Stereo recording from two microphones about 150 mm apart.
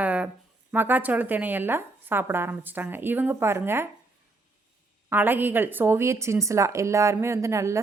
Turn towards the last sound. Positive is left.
turn(degrees=-20)  # may be behind; listen again after turning